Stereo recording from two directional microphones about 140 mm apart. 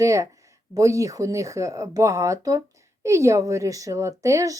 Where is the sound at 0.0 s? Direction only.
20° right (ahead or behind).